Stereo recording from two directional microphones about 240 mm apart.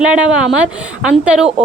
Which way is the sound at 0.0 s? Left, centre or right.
Centre.